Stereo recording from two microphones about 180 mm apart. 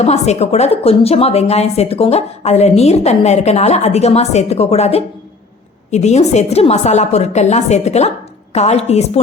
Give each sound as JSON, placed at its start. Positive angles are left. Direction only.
{"t": 0.0, "sound": "a woman's voice", "side_deg": 35}